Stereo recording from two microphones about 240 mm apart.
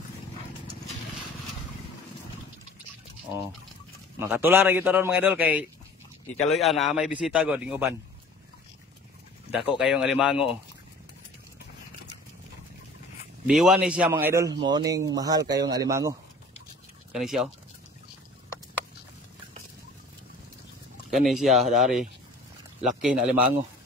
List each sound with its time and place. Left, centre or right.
4.2 s a man's voice: centre
9.8 s a man's voice: centre
13.5 s a man's voice: centre
17.1 s a man's voice: centre
21.1 s a man's voice: centre